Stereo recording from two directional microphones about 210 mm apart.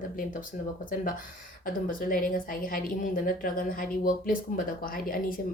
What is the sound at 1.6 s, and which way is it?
A woman's voice, 40° left (ahead or behind).